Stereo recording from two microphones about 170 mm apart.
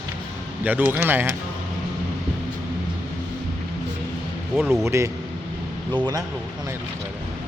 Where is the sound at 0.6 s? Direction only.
10° right (ahead or behind).